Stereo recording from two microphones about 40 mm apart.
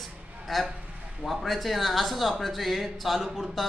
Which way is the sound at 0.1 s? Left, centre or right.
Right.